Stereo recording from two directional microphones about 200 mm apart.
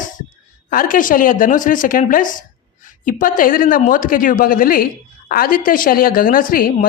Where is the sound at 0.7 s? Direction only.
45° left (ahead or behind).